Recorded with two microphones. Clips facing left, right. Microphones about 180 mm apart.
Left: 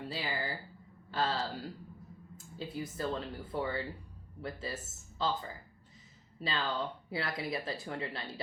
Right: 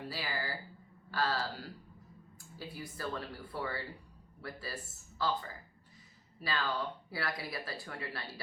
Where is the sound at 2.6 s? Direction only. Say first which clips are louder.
Left 5 dB; 20° left (ahead or behind).